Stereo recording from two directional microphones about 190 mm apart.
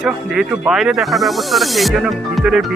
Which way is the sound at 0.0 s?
5° right (ahead or behind).